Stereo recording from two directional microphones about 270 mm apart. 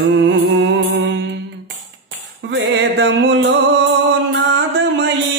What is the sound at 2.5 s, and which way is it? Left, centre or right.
Music, right.